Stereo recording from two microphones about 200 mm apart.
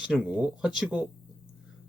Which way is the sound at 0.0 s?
5° right (ahead or behind).